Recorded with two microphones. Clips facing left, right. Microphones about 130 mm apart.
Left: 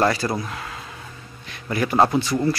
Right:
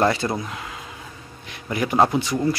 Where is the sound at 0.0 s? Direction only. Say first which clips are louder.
Even; 20° right (ahead or behind).